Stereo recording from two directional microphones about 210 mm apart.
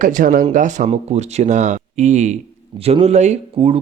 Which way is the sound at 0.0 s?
40° right (ahead or behind).